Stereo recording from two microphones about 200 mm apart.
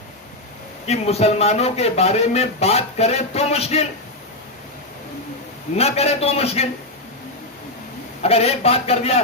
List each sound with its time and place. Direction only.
0.9 s a man's voice: 30° left (ahead or behind)
5.7 s a man's voice: 30° left (ahead or behind)
8.2 s a man's voice: 30° left (ahead or behind)